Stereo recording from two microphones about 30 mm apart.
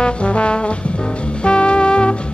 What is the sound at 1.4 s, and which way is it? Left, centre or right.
Music, left.